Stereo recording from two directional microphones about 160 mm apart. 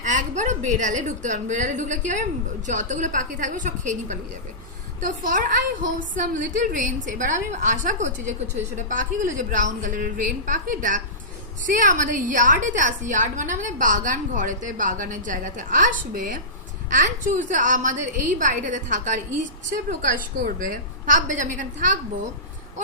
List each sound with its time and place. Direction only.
0.0 s a woman's voice: 50° right (ahead or behind)